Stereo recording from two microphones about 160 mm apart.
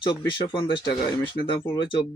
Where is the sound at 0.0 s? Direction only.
30° left (ahead or behind).